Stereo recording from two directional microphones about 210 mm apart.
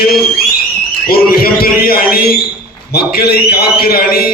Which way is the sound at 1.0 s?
45° left (ahead or behind).